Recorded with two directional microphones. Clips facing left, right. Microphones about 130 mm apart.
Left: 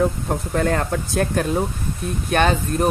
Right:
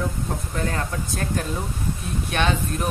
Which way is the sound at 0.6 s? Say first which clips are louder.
Left 6 dB; 75° left (ahead or behind).